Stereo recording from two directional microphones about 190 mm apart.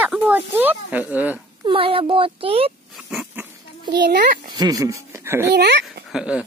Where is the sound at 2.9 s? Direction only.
Centre (ahead or behind).